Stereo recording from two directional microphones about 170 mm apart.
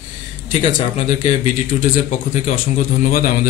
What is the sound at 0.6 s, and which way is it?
Speech, 45° left (ahead or behind).